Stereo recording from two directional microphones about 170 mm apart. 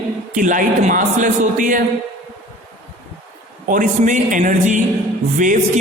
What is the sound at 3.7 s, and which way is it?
A man's voice, 50° right (ahead or behind).